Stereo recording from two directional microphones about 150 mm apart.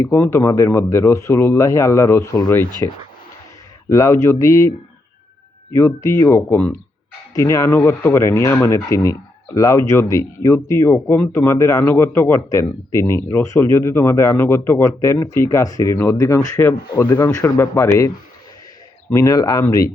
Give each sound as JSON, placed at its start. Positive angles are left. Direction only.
{"t": 0.0, "sound": "speech", "side_deg": 20}
{"t": 3.8, "sound": "speech", "side_deg": 20}
{"t": 5.7, "sound": "speech", "side_deg": 20}
{"t": 19.1, "sound": "speech", "side_deg": 20}